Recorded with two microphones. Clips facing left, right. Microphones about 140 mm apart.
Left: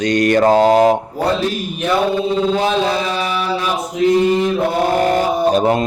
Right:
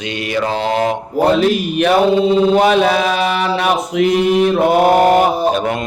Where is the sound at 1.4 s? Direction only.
85° right.